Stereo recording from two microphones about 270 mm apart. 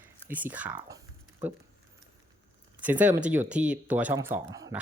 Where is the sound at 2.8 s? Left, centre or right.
Centre.